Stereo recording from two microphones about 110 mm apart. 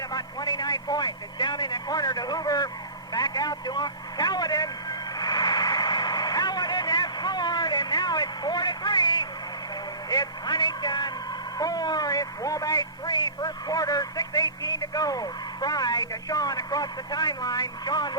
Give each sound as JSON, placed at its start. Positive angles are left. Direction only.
{"t": 0.1, "sound": "a man's voice", "side_deg": 40}
{"t": 3.1, "sound": "vehicle", "side_deg": 35}
{"t": 10.1, "sound": "a man's voice", "side_deg": 35}